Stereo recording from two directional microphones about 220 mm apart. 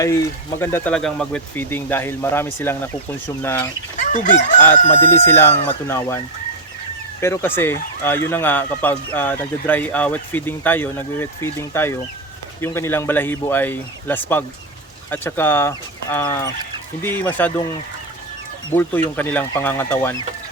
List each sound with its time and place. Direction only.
0.5 s speech: 10° left (ahead or behind)
3.9 s chicken: 35° left (ahead or behind)
4.9 s speech: 10° left (ahead or behind)
18.7 s speech: 10° left (ahead or behind)